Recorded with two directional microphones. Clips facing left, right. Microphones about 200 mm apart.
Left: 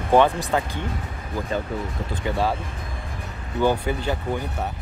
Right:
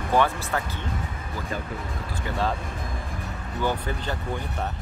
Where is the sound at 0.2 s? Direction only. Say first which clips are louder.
Left 5 dB; 20° left (ahead or behind).